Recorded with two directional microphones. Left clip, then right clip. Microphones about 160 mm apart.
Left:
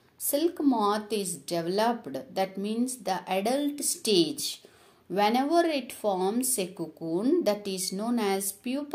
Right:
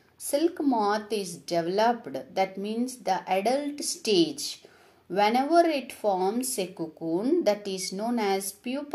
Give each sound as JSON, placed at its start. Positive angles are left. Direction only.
{"t": 0.3, "sound": "a woman's voice", "side_deg": 0}